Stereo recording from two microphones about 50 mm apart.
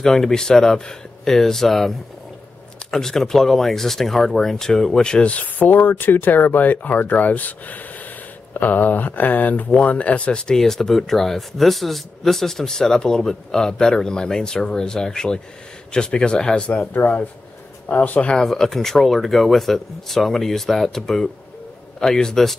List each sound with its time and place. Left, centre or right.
0.0 s speech: centre; by 18.3 s left
18.3 s speech: centre